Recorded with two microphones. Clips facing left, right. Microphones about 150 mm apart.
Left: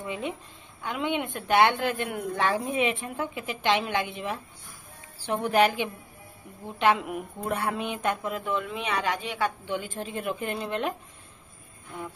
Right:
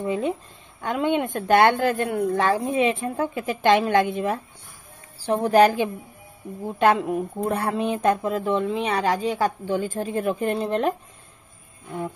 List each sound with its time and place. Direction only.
0.0 s a woman's voice: 40° right (ahead or behind)
7.1 s speech: 30° right (ahead or behind)